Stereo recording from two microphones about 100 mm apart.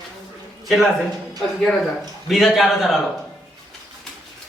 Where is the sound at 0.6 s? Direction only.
Centre (ahead or behind).